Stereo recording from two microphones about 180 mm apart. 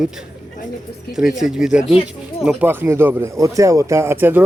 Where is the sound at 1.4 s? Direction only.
5° right (ahead or behind).